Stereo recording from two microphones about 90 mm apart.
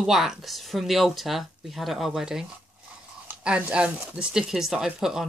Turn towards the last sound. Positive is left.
turn(degrees=-5)  # may be behind; listen again after turning